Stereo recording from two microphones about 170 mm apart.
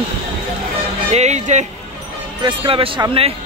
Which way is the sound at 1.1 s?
40° right (ahead or behind).